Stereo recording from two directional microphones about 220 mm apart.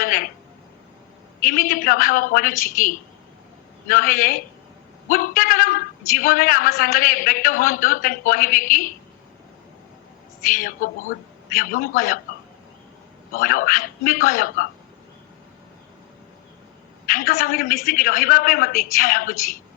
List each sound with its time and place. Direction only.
0.0 s a sound: 40° left (ahead or behind)
1.5 s a man's voice: 40° left (ahead or behind)
3.8 s a man's voice: 40° left (ahead or behind)
10.6 s a man's voice: 35° left (ahead or behind)
13.3 s a man's voice: 40° left (ahead or behind)
17.1 s a man's voice: 40° left (ahead or behind)